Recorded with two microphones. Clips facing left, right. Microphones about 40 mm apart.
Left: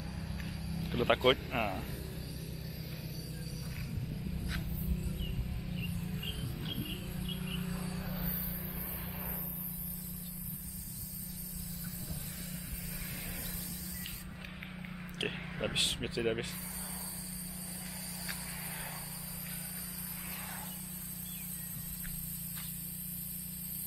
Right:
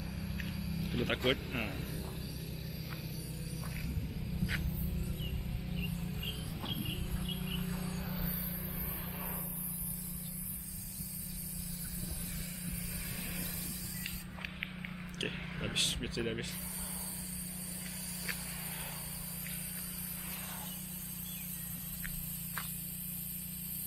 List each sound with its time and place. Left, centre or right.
0.5 s a sound: right
1.0 s speech: centre
1.6 s speech: centre
5.2 s music: centre
7.2 s cricket: centre
7.7 s a sound: centre
8.1 s vehicle: centre
15.1 s a sound: centre
15.6 s vehicle: centre